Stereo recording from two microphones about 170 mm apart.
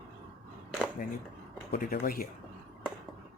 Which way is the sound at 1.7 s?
55° left (ahead or behind).